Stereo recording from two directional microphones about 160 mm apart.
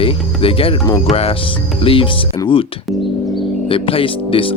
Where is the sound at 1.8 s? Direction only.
35° left (ahead or behind).